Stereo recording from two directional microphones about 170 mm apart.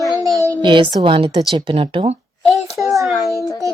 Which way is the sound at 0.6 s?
30° right (ahead or behind).